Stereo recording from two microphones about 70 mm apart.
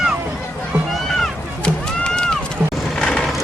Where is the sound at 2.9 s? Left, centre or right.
Centre.